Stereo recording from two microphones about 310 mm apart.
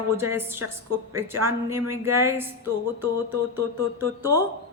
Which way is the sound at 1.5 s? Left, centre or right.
Centre.